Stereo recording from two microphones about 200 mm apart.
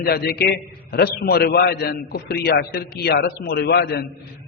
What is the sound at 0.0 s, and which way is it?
A man's voice, 50° left (ahead or behind).